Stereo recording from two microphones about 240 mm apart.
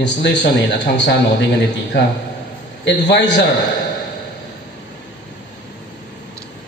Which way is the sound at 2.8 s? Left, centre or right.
Left.